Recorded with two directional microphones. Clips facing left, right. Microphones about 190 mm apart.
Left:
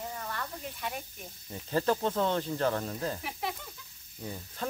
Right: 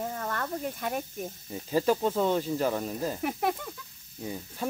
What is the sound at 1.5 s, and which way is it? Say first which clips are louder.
Speech: right 3 dB; 10° right (ahead or behind).